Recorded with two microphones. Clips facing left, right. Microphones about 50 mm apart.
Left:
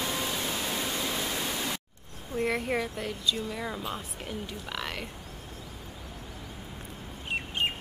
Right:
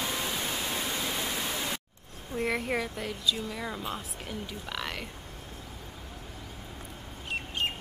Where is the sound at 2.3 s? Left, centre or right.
Centre.